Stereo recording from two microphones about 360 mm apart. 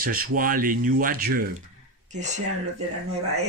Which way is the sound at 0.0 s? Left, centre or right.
Right.